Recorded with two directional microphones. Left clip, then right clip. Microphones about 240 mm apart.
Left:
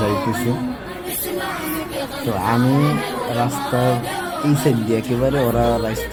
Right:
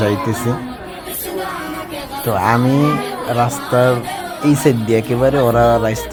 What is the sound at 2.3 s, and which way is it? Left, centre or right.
Speech, centre.